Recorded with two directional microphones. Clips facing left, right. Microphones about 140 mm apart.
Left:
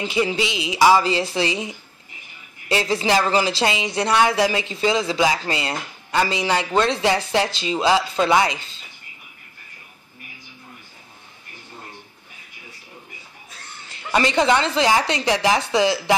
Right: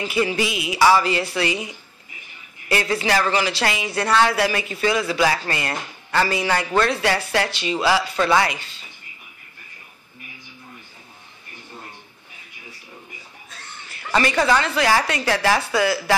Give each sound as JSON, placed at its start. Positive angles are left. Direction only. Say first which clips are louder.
{"t": 0.0, "sound": "speech", "louder": "even", "side_deg": 25}
{"t": 13.9, "sound": "speech", "louder": "left 1 dB", "side_deg": 20}